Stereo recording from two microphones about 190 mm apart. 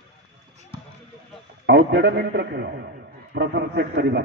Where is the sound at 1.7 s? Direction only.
65° right (ahead or behind).